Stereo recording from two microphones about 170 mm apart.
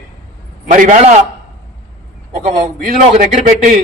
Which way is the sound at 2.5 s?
45° right (ahead or behind).